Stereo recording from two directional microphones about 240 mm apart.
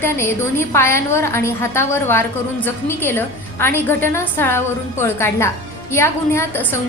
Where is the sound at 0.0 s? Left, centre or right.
Centre.